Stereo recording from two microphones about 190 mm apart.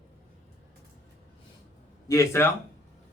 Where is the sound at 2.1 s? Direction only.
15° left (ahead or behind).